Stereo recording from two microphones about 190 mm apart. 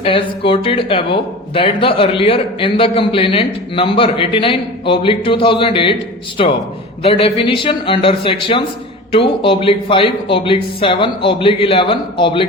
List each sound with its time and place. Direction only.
0.0 s speech: 30° left (ahead or behind)